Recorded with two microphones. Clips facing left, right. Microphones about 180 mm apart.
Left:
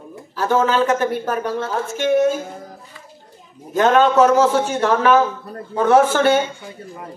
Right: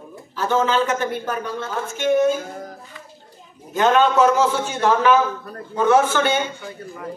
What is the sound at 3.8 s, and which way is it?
Speech, 40° left (ahead or behind).